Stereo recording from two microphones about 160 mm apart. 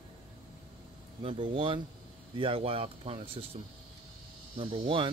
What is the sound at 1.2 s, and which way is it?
Speech, 35° right (ahead or behind).